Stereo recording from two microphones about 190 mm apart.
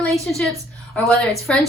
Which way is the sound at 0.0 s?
Centre (ahead or behind).